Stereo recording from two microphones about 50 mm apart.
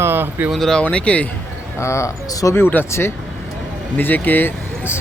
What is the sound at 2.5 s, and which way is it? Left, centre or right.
Speech, left.